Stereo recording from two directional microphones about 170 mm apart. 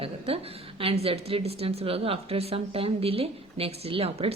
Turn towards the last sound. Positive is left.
turn(degrees=-35)  # may be behind; listen again after turning